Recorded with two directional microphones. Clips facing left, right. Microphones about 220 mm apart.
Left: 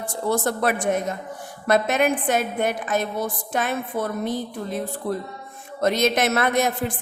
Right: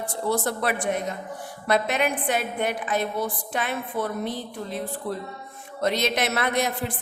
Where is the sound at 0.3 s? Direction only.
45° left (ahead or behind).